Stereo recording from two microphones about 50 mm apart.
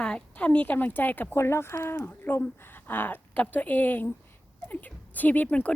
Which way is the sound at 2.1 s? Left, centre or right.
Left.